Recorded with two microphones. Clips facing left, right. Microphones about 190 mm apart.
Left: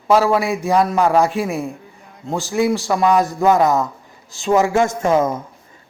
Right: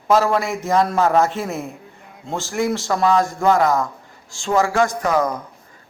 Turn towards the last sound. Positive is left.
turn(degrees=25)  # may be behind; listen again after turning